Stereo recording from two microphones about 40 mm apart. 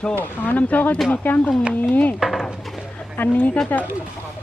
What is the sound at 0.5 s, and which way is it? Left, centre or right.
Speech, left.